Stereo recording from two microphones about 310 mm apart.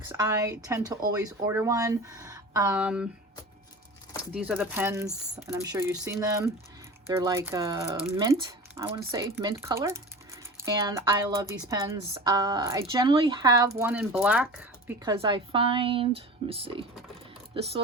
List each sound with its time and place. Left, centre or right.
0.2 s speech: centre
4.4 s speech: centre